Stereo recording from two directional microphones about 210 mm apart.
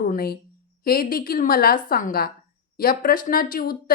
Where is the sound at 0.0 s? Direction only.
45° left (ahead or behind).